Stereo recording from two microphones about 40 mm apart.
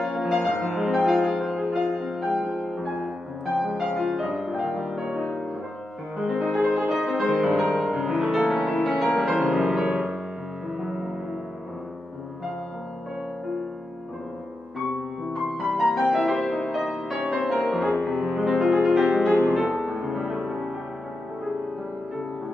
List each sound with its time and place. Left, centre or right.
0.0 s music: centre
3.8 s music: centre
4.4 s music: centre
4.6 s music: centre
6.6 s music: centre
7.9 s music: centre
15.5 s music: centre
16.9 s music: centre